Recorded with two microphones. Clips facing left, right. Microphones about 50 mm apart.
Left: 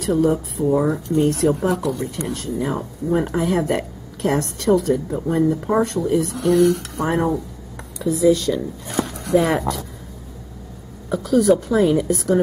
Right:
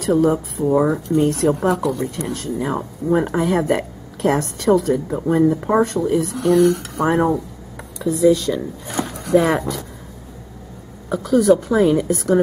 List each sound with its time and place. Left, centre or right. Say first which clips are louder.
0.0 s speech: right 2 dB; centre
5.0 s speech: right 3 dB; centre
11.1 s speech: right 1 dB; centre